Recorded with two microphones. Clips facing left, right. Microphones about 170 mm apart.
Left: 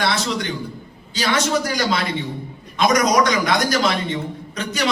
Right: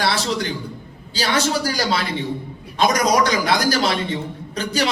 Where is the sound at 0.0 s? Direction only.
35° right (ahead or behind).